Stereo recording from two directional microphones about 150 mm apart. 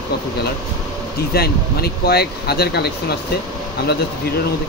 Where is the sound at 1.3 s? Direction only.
90° left.